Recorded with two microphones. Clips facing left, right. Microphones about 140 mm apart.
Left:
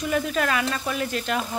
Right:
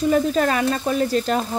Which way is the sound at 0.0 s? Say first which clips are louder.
Right 6 dB; 35° right (ahead or behind).